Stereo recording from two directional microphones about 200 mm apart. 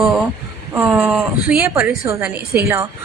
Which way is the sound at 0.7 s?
10° right (ahead or behind).